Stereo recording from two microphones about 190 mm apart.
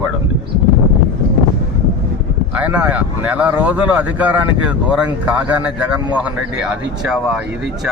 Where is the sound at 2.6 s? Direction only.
10° right (ahead or behind).